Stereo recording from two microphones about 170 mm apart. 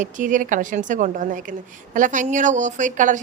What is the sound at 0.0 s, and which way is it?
A woman's voice, 50° right (ahead or behind).